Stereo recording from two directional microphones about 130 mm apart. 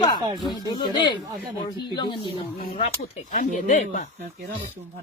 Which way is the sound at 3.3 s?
90° left.